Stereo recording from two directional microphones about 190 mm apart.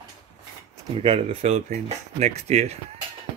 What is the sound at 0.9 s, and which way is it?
Speech, 30° right (ahead or behind).